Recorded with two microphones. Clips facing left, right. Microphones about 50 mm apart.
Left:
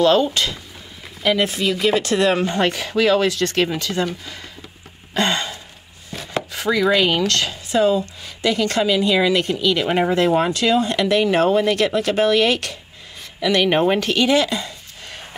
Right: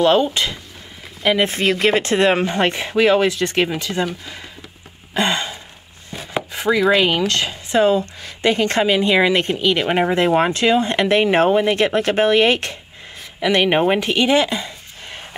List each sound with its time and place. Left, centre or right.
0.0 s speech: centre
1.4 s speech: right; by 4.4 s centre
5.1 s a sound: centre
6.5 s speech: centre
7.8 s speech: right